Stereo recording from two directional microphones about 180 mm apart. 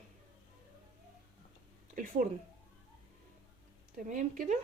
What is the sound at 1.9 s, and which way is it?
Speech, 50° right (ahead or behind).